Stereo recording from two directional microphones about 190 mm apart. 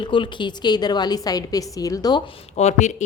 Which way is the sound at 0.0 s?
25° left (ahead or behind).